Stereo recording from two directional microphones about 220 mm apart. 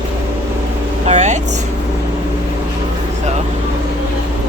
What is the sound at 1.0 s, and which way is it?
Vehicle, 30° right (ahead or behind).